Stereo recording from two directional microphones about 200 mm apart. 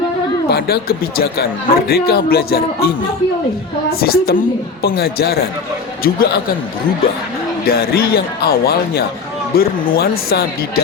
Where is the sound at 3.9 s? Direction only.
50° left (ahead or behind).